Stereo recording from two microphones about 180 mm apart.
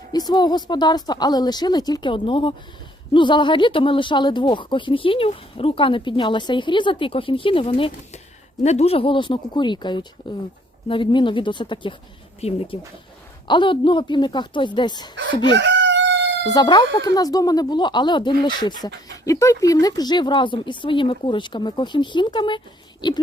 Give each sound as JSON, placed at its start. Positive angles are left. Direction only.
{"t": 0.1, "sound": "speech", "side_deg": 20}
{"t": 15.5, "sound": "chicken", "side_deg": -80}
{"t": 16.5, "sound": "speech", "side_deg": 20}